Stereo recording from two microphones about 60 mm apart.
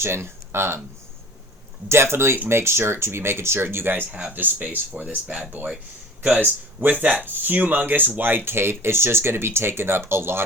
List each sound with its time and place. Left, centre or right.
0.0 s speech: right
1.9 s speech: right
4.4 s speech: right
5.0 s speech: centre
6.7 s speech: right